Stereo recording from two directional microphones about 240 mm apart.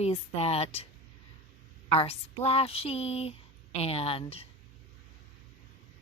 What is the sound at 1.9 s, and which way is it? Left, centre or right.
Speech, left.